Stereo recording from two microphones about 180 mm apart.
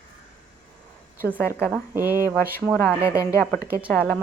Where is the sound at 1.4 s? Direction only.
10° left (ahead or behind).